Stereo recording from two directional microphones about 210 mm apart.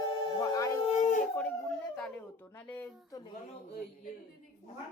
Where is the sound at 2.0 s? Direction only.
5° left (ahead or behind).